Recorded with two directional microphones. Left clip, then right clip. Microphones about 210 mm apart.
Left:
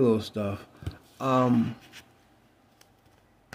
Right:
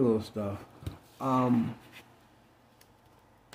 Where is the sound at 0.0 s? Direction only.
25° left (ahead or behind).